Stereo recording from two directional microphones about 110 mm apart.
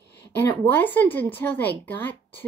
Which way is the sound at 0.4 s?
15° left (ahead or behind).